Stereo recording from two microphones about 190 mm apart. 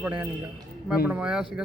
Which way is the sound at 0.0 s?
10° right (ahead or behind).